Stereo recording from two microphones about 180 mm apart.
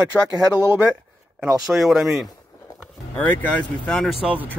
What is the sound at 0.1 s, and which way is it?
Speech, 10° left (ahead or behind).